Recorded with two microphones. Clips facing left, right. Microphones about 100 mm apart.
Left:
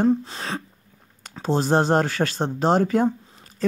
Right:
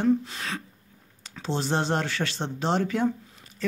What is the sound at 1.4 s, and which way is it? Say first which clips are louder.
Speech: left 7 dB; 45° left (ahead or behind).